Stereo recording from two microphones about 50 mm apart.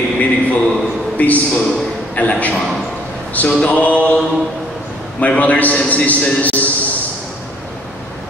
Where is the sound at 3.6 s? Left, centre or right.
Left.